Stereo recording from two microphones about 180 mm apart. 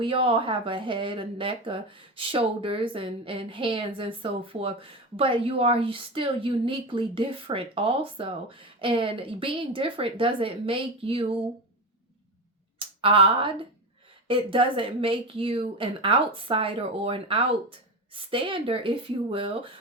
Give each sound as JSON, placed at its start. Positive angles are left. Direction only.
{"t": 0.0, "sound": "speech", "side_deg": -30}
{"t": 12.8, "sound": "speech", "side_deg": -30}